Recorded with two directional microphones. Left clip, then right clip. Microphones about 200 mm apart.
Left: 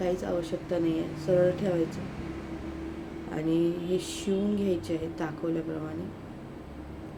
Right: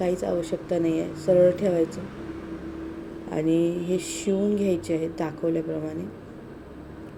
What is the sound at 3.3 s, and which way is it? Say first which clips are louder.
Speech: right 4 dB; 15° right (ahead or behind).